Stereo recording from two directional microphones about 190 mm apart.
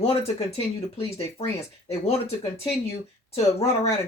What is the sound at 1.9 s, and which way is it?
Speech, 35° left (ahead or behind).